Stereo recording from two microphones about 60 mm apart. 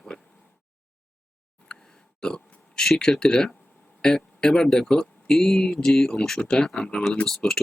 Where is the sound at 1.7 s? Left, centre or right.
Centre.